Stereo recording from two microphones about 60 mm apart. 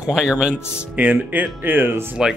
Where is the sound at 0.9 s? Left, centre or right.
Right.